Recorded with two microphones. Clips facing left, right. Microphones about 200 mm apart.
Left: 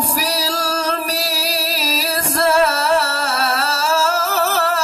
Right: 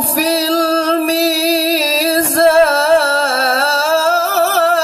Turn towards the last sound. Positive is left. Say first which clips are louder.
# right 6 dB
turn(degrees=-50)  # may be behind; listen again after turning